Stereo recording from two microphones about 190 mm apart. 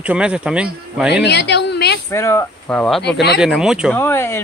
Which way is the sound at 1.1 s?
60° left (ahead or behind).